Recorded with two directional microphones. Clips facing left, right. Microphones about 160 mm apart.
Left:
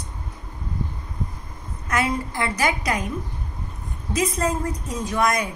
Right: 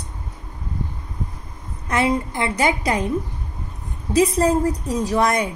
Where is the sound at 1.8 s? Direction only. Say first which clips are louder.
Right 4 dB; 25° right (ahead or behind).